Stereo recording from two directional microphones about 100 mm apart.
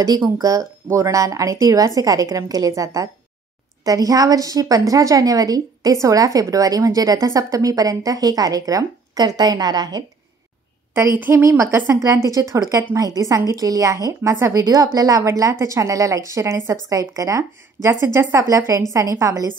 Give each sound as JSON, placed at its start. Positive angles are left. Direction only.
{"t": 0.4, "sound": "a woman's voice", "side_deg": -35}
{"t": 11.0, "sound": "a woman's voice", "side_deg": -25}